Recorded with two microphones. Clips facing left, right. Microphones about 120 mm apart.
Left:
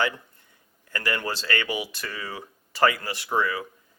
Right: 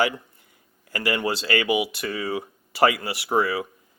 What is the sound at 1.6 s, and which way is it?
Speech, 5° right (ahead or behind).